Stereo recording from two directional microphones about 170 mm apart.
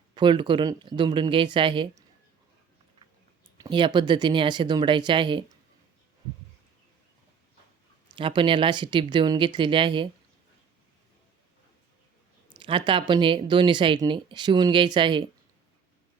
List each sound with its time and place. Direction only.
0.1 s speech: 30° right (ahead or behind)
3.6 s speech: 30° right (ahead or behind)
8.1 s speech: 30° right (ahead or behind)
12.5 s speech: 30° right (ahead or behind)